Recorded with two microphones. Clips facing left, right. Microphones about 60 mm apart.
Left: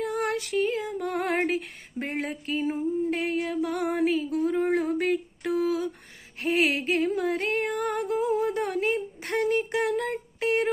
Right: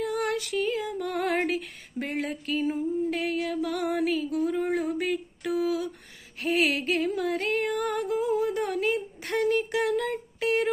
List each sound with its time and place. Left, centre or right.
0.0 s female singing: left
4.8 s a sound: left
6.4 s music: left